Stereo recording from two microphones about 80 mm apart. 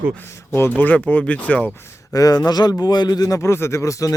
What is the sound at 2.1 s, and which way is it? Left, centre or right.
Speech, left.